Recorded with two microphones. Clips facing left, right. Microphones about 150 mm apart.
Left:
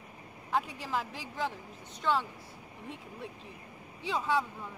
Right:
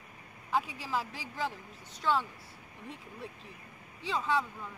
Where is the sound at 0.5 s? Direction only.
5° right (ahead or behind).